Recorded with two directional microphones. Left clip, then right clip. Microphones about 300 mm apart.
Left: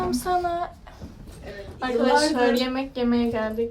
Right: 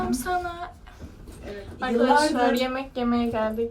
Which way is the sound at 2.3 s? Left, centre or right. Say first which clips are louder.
Left 1 dB; centre.